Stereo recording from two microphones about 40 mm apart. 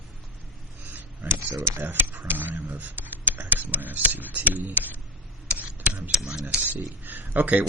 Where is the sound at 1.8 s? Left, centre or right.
Right.